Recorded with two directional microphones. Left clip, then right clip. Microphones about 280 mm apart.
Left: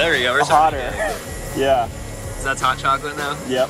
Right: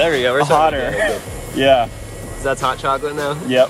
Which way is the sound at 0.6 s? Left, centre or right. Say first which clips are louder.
Right 2 dB; right.